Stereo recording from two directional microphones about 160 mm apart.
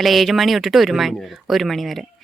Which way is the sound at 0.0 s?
Centre (ahead or behind).